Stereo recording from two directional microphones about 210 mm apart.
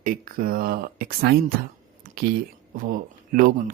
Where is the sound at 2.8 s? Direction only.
45° right (ahead or behind).